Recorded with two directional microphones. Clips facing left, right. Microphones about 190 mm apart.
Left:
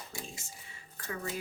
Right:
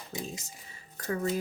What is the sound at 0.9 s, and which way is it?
Speech, 40° right (ahead or behind).